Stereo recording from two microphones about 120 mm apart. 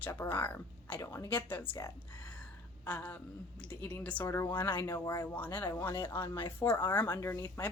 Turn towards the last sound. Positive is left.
turn(degrees=20)  # may be behind; listen again after turning